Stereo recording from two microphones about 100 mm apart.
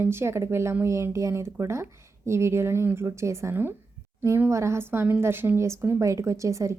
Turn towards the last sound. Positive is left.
turn(degrees=-30)  # may be behind; listen again after turning